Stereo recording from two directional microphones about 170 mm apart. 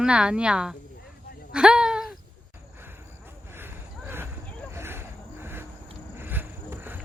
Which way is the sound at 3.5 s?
15° right (ahead or behind).